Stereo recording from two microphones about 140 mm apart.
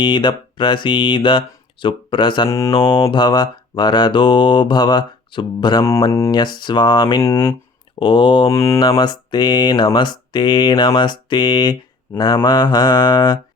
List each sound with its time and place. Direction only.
0.0 s speech: 35° left (ahead or behind)
6.1 s mantra: 20° left (ahead or behind)
6.6 s speech: 35° left (ahead or behind)
8.5 s mantra: 20° left (ahead or behind)
8.8 s speech: 35° left (ahead or behind)